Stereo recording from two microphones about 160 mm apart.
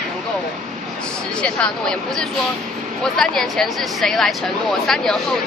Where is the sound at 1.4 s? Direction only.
5° left (ahead or behind).